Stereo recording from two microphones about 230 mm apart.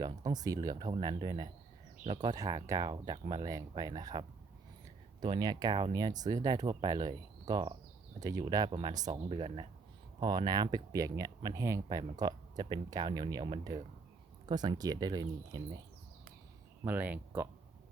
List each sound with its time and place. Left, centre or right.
0.0 s speech: centre
16.8 s speech: centre